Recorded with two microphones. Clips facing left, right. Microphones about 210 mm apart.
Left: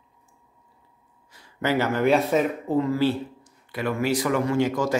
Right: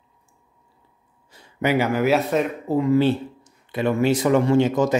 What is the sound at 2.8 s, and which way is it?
Speech, 20° right (ahead or behind).